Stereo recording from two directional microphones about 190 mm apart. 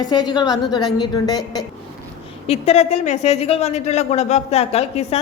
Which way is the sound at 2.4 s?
35° left (ahead or behind).